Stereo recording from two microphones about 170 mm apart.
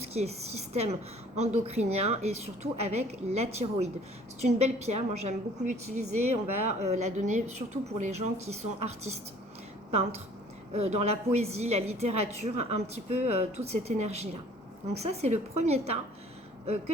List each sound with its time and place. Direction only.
0.0 s a woman's voice: 40° right (ahead or behind)
10.7 s a woman's voice: 40° right (ahead or behind)